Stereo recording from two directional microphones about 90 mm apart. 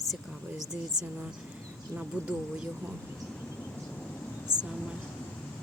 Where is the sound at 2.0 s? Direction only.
10° right (ahead or behind).